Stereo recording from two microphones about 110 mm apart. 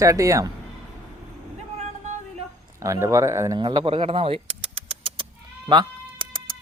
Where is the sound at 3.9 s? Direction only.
55° right (ahead or behind).